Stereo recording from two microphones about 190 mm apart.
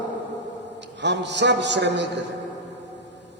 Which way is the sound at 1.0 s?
65° right (ahead or behind).